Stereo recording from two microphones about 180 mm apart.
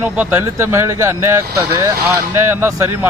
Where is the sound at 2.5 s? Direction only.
15° right (ahead or behind).